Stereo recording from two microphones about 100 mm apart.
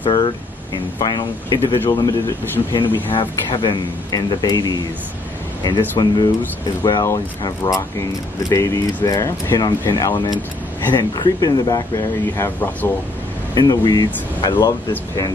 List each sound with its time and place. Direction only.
0.0 s speech: 50° left (ahead or behind)
3.1 s speech: 55° left (ahead or behind)
8.4 s speech: 35° left (ahead or behind)
12.4 s speech: 20° left (ahead or behind)
13.6 s speech: 40° left (ahead or behind)